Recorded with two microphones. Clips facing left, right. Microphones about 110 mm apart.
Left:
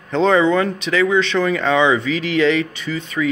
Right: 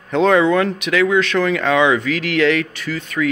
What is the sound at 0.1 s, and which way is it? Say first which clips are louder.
Speech: right 1 dB; 5° right (ahead or behind).